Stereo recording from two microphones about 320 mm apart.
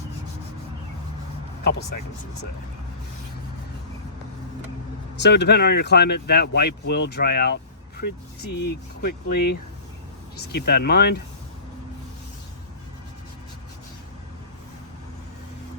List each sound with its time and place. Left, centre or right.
5.1 s speech: left